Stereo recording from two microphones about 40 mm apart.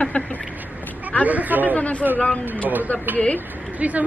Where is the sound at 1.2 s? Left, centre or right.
Right.